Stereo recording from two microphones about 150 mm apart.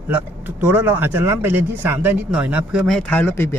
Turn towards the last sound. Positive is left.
turn(degrees=15)  # may be behind; listen again after turning